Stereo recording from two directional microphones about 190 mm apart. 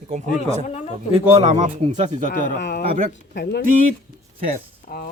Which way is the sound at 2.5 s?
65° left (ahead or behind).